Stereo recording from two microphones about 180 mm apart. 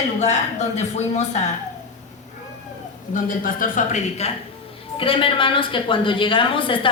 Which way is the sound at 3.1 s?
50° left (ahead or behind).